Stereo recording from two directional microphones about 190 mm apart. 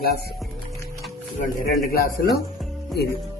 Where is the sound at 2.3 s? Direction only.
Centre (ahead or behind).